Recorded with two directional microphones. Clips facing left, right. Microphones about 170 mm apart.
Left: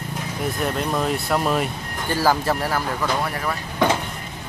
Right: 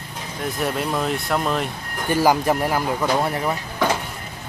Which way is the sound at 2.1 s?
15° right (ahead or behind).